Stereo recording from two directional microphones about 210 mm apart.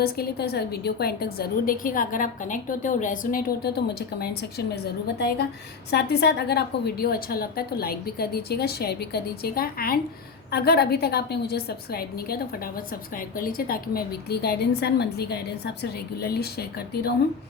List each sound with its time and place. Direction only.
0.0 s a woman's voice: 50° left (ahead or behind)
5.9 s a woman's voice: 50° left (ahead or behind)